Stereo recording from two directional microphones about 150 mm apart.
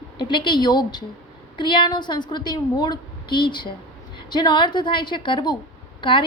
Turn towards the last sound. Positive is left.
turn(degrees=35)  # may be behind; listen again after turning